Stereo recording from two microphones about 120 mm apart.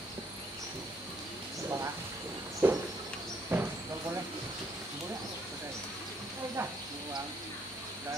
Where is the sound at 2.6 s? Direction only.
20° right (ahead or behind).